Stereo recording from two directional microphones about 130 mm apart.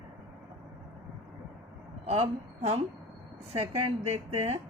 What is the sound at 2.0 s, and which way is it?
A woman's voice, 55° right (ahead or behind).